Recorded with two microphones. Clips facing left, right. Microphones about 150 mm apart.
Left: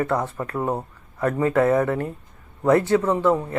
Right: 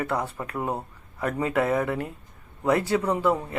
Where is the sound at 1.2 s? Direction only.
15° right (ahead or behind).